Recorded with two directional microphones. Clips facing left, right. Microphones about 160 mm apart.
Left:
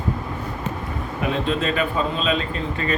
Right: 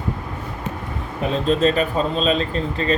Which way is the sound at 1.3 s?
35° right (ahead or behind).